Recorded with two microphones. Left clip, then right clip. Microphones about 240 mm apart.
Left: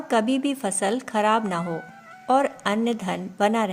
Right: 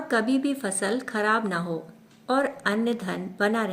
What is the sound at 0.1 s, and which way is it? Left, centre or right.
A woman's voice, left.